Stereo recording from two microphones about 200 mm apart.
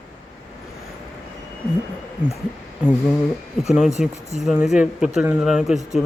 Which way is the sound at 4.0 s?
5° right (ahead or behind).